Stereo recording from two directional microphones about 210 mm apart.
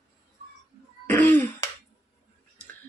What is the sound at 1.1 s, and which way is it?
Cough, 10° left (ahead or behind).